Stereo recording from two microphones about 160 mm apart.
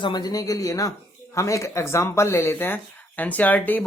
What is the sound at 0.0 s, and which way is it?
Speech, 25° left (ahead or behind).